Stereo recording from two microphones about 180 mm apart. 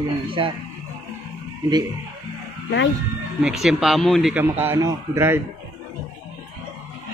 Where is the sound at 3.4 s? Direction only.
Centre (ahead or behind).